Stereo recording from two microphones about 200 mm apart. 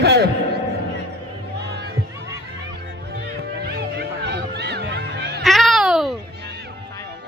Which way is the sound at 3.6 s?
50° right (ahead or behind).